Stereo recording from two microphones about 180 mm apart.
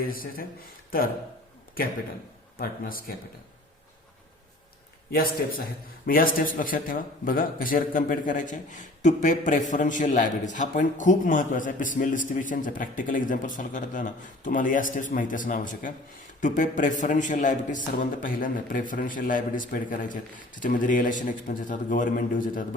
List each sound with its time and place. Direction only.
0.0 s a man's voice: 55° left (ahead or behind)
2.6 s a man's voice: 55° left (ahead or behind)
5.1 s a man's voice: 55° left (ahead or behind)